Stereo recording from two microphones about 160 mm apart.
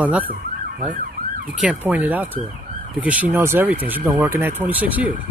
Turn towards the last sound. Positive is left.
turn(degrees=-10)  # may be behind; listen again after turning